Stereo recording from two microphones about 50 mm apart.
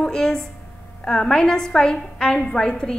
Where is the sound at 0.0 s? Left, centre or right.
Centre.